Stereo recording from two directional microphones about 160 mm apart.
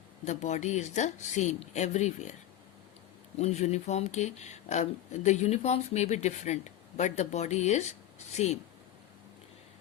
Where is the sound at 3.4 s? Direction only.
45° left (ahead or behind).